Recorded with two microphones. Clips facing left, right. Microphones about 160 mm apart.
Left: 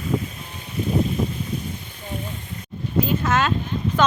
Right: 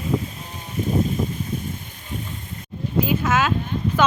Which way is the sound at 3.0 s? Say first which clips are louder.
Even; 5° right (ahead or behind).